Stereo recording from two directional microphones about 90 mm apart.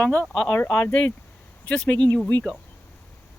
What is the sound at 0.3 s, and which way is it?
Speech, 5° left (ahead or behind).